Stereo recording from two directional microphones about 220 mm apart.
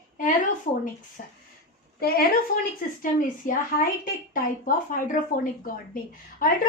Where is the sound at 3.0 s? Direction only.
40° left (ahead or behind).